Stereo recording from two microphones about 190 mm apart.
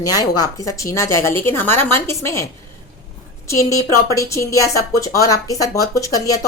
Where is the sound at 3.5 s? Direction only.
15° left (ahead or behind).